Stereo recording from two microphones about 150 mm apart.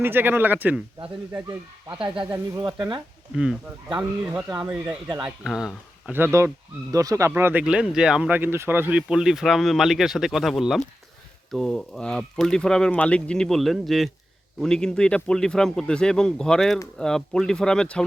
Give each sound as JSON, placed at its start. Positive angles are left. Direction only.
{"t": 0.0, "sound": "speech", "side_deg": -15}
{"t": 1.3, "sound": "speech", "side_deg": -20}
{"t": 2.0, "sound": "speech", "side_deg": -35}
{"t": 3.3, "sound": "speech", "side_deg": -5}
{"t": 4.6, "sound": "speech", "side_deg": -5}